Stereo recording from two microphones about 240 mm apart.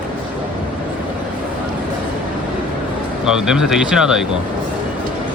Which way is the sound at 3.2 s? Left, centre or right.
Centre.